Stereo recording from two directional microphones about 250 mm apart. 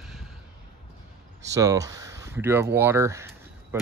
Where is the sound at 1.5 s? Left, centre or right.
Centre.